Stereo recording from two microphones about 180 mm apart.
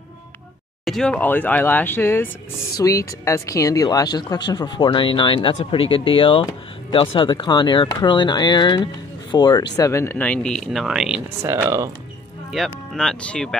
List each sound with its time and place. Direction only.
0.8 s speech: 5° left (ahead or behind)
11.6 s speech: 15° right (ahead or behind)
12.4 s speech: centre (ahead or behind)